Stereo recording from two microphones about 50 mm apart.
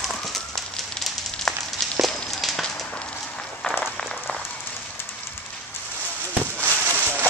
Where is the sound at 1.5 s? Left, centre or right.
Centre.